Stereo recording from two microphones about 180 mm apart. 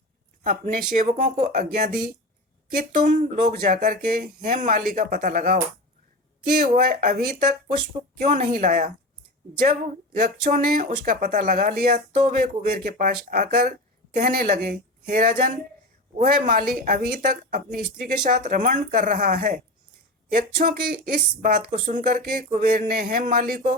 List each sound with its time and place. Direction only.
0.4 s speech: 45° right (ahead or behind)
3.0 s speech: 45° right (ahead or behind)
6.6 s speech: 50° right (ahead or behind)